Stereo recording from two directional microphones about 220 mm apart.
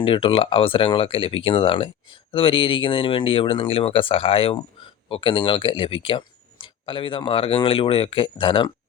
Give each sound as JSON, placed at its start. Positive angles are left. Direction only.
{"t": 0.0, "sound": "speech", "side_deg": 25}